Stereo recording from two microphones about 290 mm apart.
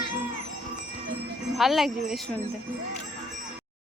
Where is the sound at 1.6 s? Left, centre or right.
Centre.